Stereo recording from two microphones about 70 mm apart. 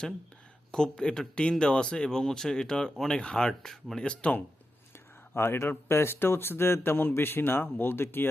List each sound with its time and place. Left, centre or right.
0.7 s speech: centre
5.3 s speech: left